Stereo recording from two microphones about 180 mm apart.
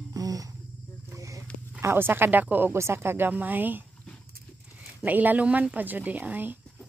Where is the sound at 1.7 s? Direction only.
10° right (ahead or behind).